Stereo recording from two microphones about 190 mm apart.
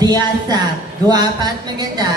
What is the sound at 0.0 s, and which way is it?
A woman's voice, 20° right (ahead or behind).